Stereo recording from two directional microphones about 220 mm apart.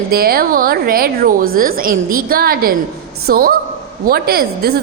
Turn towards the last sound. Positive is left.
turn(degrees=-45)  # may be behind; listen again after turning